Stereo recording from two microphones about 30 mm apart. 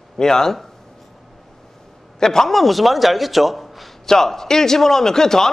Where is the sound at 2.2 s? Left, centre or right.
Centre.